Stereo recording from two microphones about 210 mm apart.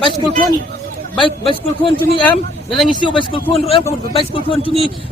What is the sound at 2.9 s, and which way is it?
A man's voice, 20° left (ahead or behind).